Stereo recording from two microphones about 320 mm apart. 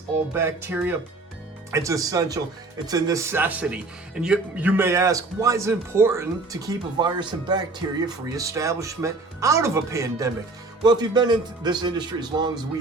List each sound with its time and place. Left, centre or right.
0.3 s speech: centre